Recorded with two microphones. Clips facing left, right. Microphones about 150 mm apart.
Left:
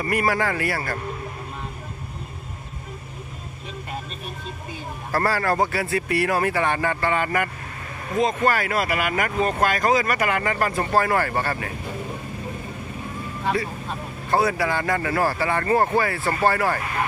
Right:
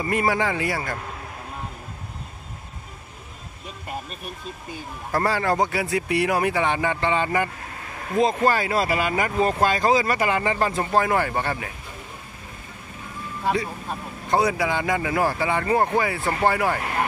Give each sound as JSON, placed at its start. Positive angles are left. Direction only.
{"t": 0.0, "sound": "speech", "side_deg": -20}
{"t": 5.1, "sound": "speech", "side_deg": -15}
{"t": 8.2, "sound": "speech", "side_deg": -30}
{"t": 13.5, "sound": "speech", "side_deg": -15}